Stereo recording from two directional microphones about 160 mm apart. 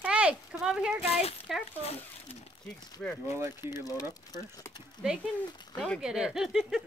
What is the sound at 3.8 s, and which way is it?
Speech, 20° left (ahead or behind).